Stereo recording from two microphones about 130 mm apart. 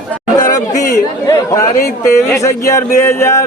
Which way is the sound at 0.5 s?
25° left (ahead or behind).